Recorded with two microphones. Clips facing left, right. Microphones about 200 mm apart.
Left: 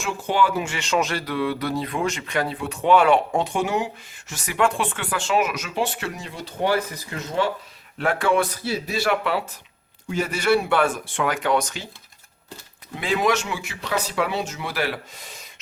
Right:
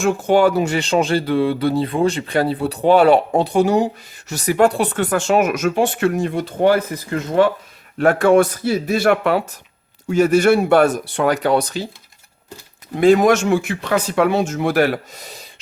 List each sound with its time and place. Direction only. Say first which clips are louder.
0.0 s speech: right 8 dB; 45° right (ahead or behind)
7.9 s speech: right 8 dB; 45° right (ahead or behind)
13.0 s speech: right 10 dB; 45° right (ahead or behind)